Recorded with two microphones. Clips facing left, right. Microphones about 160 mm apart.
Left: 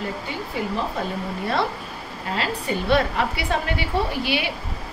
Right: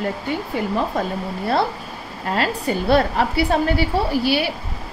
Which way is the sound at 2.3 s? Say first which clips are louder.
Right 4 dB; 40° right (ahead or behind).